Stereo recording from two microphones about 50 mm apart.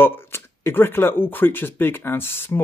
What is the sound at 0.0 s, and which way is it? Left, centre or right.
Speech, left.